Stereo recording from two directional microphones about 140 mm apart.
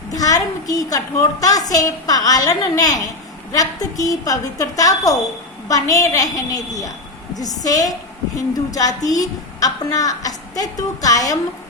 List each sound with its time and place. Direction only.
0.2 s a woman's voice: 25° left (ahead or behind)